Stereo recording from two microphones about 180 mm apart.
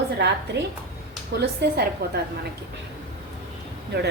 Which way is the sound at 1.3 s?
60° right (ahead or behind).